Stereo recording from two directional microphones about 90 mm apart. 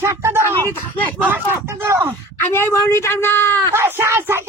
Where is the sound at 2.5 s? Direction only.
25° left (ahead or behind).